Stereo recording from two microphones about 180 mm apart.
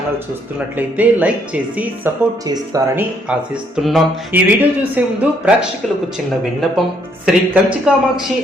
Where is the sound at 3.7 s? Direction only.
Centre (ahead or behind).